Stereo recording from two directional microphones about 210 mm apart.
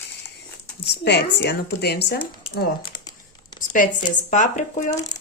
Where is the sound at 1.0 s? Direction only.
55° left (ahead or behind).